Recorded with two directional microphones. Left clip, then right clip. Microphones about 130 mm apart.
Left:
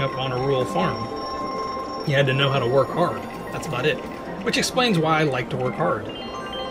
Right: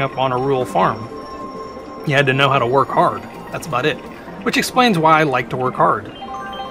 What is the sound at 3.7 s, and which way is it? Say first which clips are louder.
Speech: right 5 dB; 35° right (ahead or behind).